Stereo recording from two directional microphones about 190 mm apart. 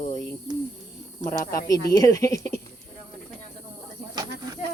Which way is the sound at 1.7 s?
20° left (ahead or behind).